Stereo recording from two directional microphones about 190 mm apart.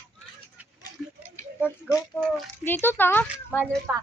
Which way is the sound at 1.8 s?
15° left (ahead or behind).